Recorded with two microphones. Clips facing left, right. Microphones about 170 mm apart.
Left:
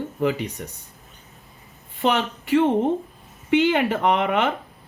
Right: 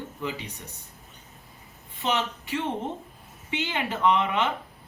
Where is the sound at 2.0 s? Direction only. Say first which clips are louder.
Left 6 dB; 60° left (ahead or behind).